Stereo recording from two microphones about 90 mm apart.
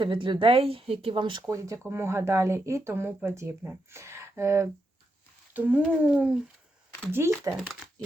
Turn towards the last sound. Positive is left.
turn(degrees=-25)  # may be behind; listen again after turning